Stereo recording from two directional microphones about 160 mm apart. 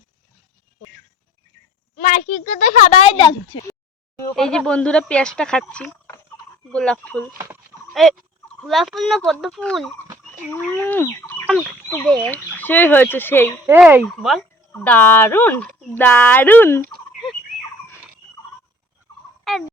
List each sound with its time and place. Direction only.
2.0 s speech: 55° left (ahead or behind)
4.4 s speech: 5° left (ahead or behind)
8.6 s speech: centre (ahead or behind)
10.7 s fowl: 10° left (ahead or behind)
12.0 s speech: 10° left (ahead or behind)
13.7 s speech: 10° right (ahead or behind)
14.8 s speech: 10° left (ahead or behind)
19.5 s fowl: centre (ahead or behind)